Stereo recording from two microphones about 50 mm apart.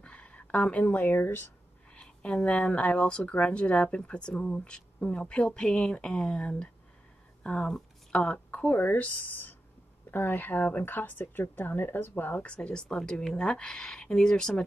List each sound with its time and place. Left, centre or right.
0.0 s speech: left
1.9 s speech: centre
8.7 s speech: left
12.4 s speech: left